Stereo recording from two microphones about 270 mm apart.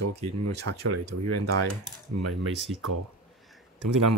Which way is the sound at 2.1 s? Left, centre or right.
Right.